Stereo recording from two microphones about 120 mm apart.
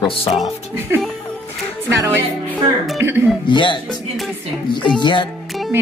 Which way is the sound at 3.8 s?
Centre (ahead or behind).